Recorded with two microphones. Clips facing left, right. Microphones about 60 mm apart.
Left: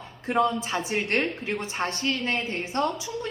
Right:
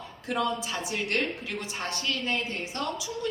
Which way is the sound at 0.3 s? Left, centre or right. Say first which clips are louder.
Left 5 dB; left.